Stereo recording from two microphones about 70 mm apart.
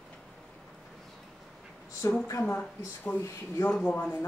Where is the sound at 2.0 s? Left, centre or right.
Left.